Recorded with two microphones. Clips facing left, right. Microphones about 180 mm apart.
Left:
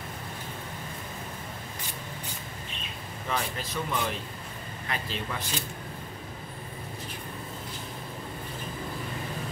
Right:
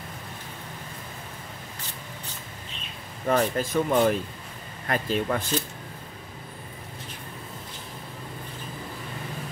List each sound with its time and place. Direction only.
3.3 s speech: 45° right (ahead or behind)